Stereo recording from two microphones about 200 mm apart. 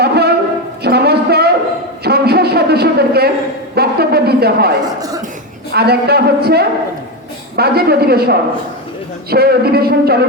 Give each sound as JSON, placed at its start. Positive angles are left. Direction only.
{"t": 0.0, "sound": "a sound", "side_deg": -55}
{"t": 4.9, "sound": "speech", "side_deg": -20}
{"t": 5.7, "sound": "speech", "side_deg": -55}